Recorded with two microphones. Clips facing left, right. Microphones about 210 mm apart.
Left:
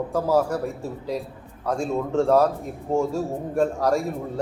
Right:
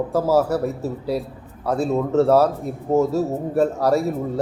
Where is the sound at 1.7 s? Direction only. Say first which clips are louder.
Right 4 dB; 10° right (ahead or behind).